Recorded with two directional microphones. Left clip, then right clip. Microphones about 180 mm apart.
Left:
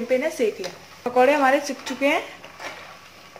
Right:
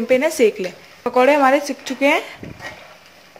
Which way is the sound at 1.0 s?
25° right (ahead or behind).